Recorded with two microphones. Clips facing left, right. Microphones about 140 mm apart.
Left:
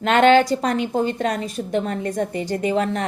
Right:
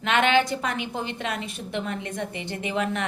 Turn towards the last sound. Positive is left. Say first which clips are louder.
# left 6 dB
turn(degrees=35)  # may be behind; listen again after turning